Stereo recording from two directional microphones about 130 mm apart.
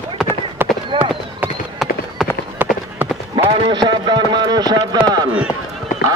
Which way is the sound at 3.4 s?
35° right (ahead or behind).